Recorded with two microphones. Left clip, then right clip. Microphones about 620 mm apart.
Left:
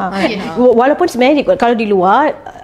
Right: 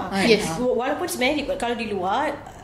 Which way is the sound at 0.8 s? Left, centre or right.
Left.